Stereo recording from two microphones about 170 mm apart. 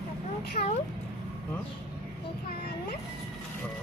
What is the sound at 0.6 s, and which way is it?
Speech, 40° left (ahead or behind).